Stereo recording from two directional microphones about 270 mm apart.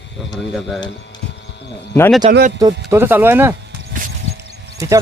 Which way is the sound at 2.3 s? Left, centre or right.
Right.